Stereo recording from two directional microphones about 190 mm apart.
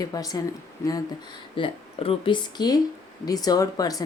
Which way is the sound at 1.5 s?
30° left (ahead or behind).